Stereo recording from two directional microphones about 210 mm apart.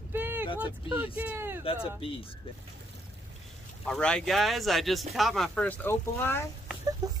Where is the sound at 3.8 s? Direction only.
5° left (ahead or behind).